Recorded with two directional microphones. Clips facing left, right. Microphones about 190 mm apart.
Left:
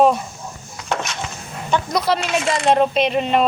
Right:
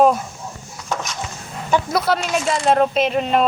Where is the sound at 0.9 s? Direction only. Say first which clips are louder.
Left 2 dB; 70° left (ahead or behind).